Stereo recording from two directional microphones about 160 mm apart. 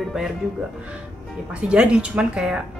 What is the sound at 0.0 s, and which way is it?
Music, centre (ahead or behind).